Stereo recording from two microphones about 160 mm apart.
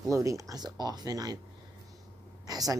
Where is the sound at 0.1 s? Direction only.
20° right (ahead or behind).